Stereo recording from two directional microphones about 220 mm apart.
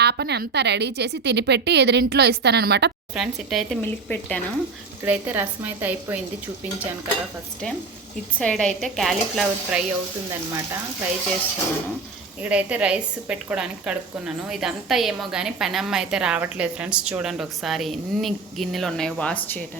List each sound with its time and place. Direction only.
0.0 s a woman's voice: 50° right (ahead or behind)
3.2 s a woman's voice: centre (ahead or behind)
5.0 s a woman's voice: 10° right (ahead or behind)
8.4 s a woman's voice: 5° left (ahead or behind)
12.4 s a woman's voice: 5° right (ahead or behind)